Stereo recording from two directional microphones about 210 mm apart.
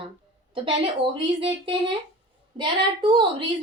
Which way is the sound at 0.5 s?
25° right (ahead or behind).